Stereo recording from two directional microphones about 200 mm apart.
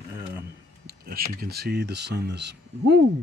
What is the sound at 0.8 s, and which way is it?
Speech, 50° right (ahead or behind).